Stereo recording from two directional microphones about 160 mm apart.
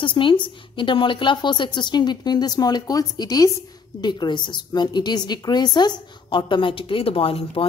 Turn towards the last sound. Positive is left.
turn(degrees=35)  # may be behind; listen again after turning